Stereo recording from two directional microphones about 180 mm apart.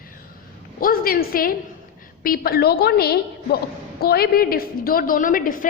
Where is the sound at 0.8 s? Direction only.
55° left (ahead or behind).